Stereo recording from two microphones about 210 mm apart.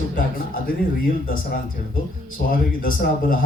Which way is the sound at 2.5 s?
40° left (ahead or behind).